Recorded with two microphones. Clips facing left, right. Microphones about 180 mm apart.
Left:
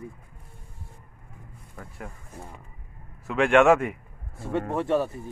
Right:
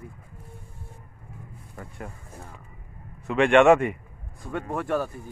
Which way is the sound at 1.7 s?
Centre (ahead or behind).